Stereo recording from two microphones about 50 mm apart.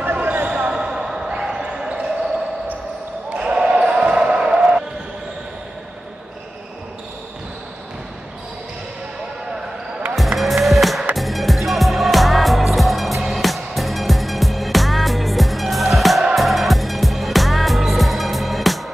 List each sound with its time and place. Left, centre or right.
0.0 s basketball bounce: right
0.5 s basketball bounce: centre
3.3 s basketball bounce: centre
10.1 s cattle: centre
11.1 s music: centre